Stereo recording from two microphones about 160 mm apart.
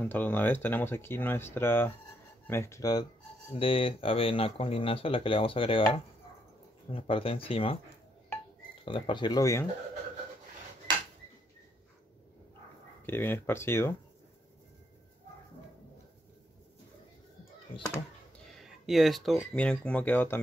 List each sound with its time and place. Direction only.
0.0 s speech: 10° left (ahead or behind)
3.5 s speech: 35° left (ahead or behind)
8.8 s speech: 30° left (ahead or behind)
13.0 s speech: 15° left (ahead or behind)
17.7 s speech: 20° left (ahead or behind)
18.5 s speech: centre (ahead or behind)